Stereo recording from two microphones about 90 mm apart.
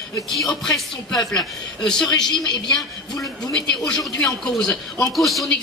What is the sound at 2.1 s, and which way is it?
Speech, 50° left (ahead or behind).